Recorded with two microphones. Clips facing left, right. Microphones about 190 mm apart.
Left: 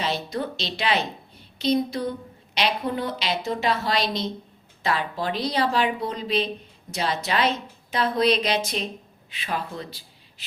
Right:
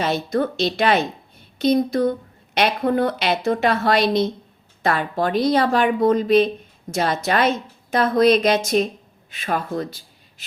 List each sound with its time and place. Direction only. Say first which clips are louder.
0.0 s a woman's voice: right 6 dB; 50° right (ahead or behind)